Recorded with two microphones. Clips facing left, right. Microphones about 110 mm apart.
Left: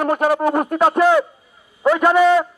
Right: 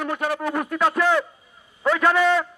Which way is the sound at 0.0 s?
45° left (ahead or behind).